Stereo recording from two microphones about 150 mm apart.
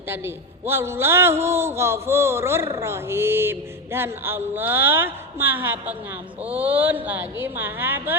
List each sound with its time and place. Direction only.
0.1 s a man's voice: 15° right (ahead or behind)